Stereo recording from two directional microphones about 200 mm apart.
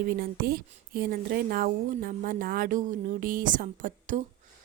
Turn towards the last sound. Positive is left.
turn(degrees=-40)  # may be behind; listen again after turning